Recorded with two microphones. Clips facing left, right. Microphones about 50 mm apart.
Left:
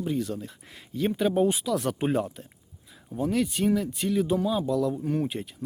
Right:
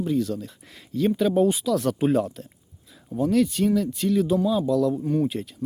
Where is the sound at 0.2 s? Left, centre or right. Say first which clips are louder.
Right 4 dB; left.